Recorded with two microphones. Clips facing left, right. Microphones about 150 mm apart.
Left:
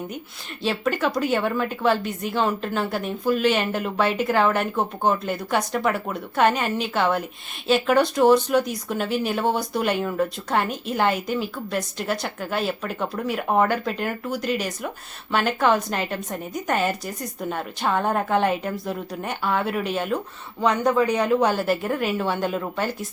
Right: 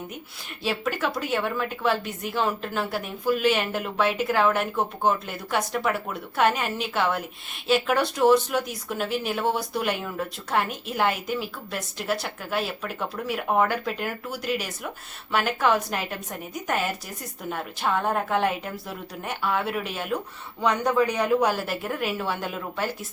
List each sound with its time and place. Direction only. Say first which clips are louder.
0.6 s a woman's voice: left 4 dB; 5° right (ahead or behind)
20.6 s speech: left 2 dB; 20° left (ahead or behind)
21.4 s a woman's voice: left 4 dB; centre (ahead or behind)